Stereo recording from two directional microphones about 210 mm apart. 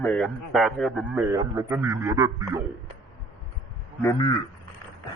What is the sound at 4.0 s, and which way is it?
Speech, 15° left (ahead or behind).